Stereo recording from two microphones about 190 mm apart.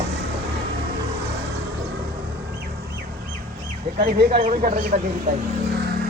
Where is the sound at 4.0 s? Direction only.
50° right (ahead or behind).